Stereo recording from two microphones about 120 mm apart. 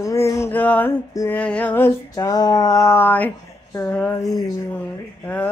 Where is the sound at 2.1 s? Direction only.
30° left (ahead or behind); by 3.3 s 15° left (ahead or behind).